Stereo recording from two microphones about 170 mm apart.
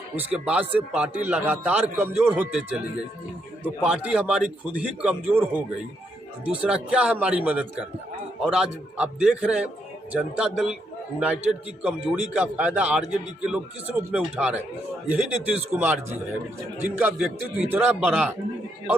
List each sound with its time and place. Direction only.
0.2 s a man's voice: 5° right (ahead or behind)
3.8 s a man's voice: 5° right (ahead or behind)
11.8 s a man's voice: 5° right (ahead or behind)